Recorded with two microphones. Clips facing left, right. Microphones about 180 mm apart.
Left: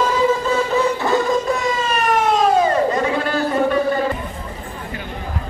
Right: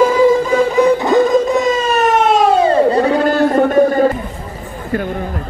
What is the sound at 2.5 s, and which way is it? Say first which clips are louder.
Music: right 5 dB; 30° right (ahead or behind).